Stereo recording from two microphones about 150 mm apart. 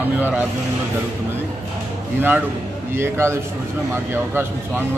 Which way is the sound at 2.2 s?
15° right (ahead or behind).